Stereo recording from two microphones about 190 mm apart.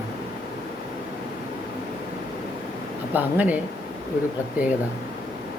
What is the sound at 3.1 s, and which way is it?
Speech, 10° right (ahead or behind).